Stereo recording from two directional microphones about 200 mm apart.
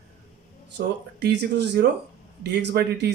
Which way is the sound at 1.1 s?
55° right (ahead or behind).